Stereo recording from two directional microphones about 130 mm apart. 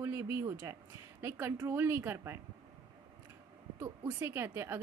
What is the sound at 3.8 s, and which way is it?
Speech, 15° right (ahead or behind).